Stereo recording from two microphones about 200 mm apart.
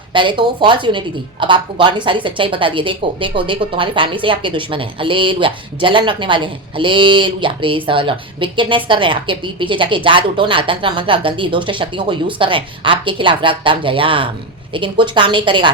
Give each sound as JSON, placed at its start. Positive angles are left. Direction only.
{"t": 0.1, "sound": "a woman's voice", "side_deg": -25}